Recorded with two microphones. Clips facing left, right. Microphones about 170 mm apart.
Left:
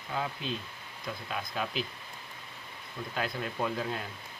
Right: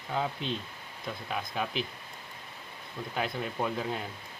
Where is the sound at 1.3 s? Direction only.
20° right (ahead or behind).